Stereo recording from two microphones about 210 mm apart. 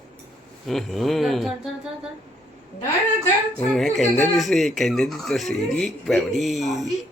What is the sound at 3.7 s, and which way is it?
Speech, centre (ahead or behind).